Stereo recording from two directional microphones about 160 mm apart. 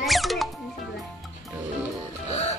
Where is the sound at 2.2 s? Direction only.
40° left (ahead or behind).